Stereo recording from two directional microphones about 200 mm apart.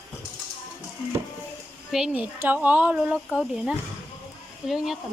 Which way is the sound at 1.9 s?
5° right (ahead or behind).